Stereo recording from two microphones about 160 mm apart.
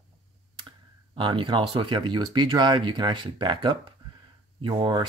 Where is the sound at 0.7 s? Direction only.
30° right (ahead or behind).